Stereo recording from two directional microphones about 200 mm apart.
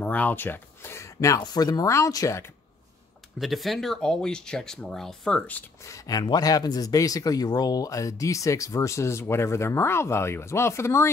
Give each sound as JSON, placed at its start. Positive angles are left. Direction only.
{"t": 0.0, "sound": "speech", "side_deg": 10}
{"t": 3.3, "sound": "speech", "side_deg": 0}
{"t": 5.9, "sound": "speech", "side_deg": 15}